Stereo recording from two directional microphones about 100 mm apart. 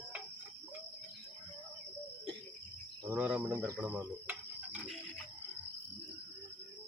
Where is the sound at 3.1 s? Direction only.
10° right (ahead or behind).